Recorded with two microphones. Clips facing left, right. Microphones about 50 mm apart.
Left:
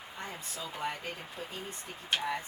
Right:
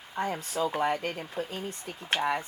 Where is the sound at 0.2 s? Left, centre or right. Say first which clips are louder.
Right 12 dB; right.